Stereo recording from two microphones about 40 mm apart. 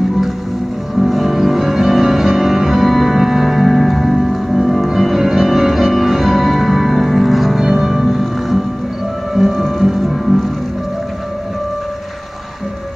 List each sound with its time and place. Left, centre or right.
0.9 s music: centre